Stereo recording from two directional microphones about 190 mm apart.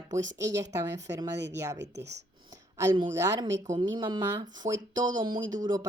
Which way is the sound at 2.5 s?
15° right (ahead or behind).